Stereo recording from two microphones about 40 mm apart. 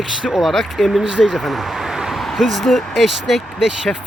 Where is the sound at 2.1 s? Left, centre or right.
Centre.